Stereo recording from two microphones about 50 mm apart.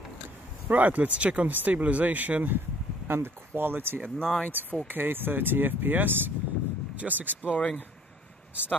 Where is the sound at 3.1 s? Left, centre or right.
Right.